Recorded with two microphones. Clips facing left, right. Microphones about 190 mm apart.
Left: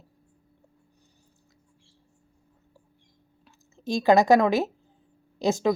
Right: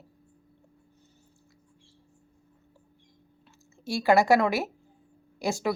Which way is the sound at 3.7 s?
20° left (ahead or behind).